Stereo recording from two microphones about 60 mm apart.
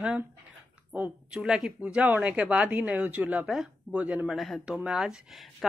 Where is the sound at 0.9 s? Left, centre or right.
Right.